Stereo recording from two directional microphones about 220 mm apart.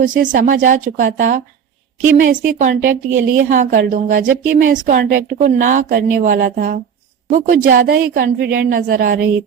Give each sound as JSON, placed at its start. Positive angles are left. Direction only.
{"t": 0.0, "sound": "a woman's voice", "side_deg": -35}